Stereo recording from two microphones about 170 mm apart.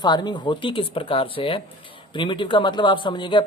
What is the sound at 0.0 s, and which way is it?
Speech, 25° left (ahead or behind).